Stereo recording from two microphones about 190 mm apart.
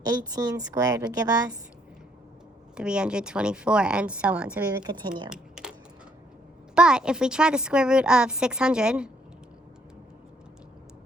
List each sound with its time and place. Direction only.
0.0 s a woman's voice: 20° right (ahead or behind)
2.7 s a woman's voice: 5° right (ahead or behind)
4.8 s a woman's voice: 20° right (ahead or behind)
5.3 s a sound: 5° right (ahead or behind)
6.7 s a woman's voice: 5° right (ahead or behind)